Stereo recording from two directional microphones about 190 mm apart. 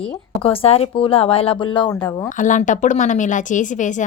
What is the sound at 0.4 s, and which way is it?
Speech, 30° left (ahead or behind).